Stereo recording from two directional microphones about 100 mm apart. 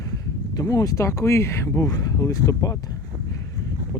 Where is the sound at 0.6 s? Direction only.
35° left (ahead or behind).